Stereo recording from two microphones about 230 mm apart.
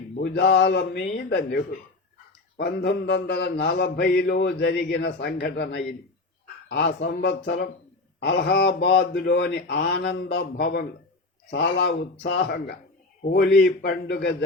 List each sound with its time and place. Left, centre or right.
0.2 s a man's voice: left